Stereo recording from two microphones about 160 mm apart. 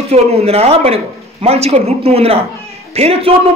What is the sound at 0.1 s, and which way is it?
Speech, 40° right (ahead or behind).